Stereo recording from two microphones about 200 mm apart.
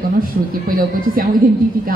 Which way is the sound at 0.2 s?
45° right (ahead or behind).